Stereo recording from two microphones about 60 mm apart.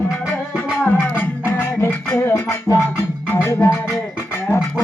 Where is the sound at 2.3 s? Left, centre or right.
Left.